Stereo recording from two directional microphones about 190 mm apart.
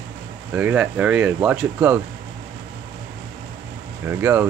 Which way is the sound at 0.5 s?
5° right (ahead or behind).